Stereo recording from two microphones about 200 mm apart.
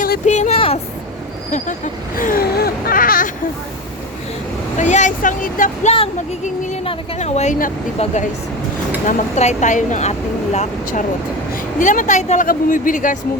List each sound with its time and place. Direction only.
0.0 s speech: 40° left (ahead or behind)
2.1 s a sound: 45° left (ahead or behind)
4.8 s speech: 35° left (ahead or behind)